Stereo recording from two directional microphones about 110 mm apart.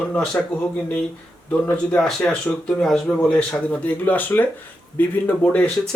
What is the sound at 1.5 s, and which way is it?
Speech, 15° left (ahead or behind).